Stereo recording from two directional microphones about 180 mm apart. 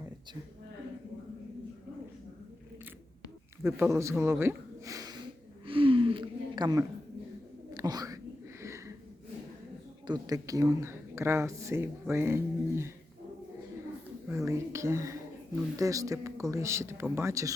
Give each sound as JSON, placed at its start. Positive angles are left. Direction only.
{"t": 3.6, "sound": "speech", "side_deg": -15}
{"t": 5.6, "sound": "gasp", "side_deg": -30}
{"t": 7.7, "sound": "whispering", "side_deg": -20}
{"t": 10.1, "sound": "speech", "side_deg": -20}
{"t": 14.3, "sound": "speech", "side_deg": -15}